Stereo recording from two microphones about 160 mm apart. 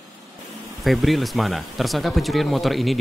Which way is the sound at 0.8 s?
Centre (ahead or behind).